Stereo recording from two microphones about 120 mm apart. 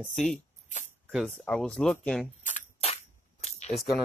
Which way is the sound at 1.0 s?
5° right (ahead or behind).